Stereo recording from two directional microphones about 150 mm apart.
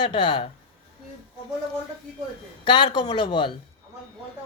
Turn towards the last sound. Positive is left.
turn(degrees=30)  # may be behind; listen again after turning